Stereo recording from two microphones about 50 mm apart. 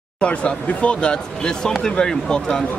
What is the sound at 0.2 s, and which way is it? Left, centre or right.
Speech, left.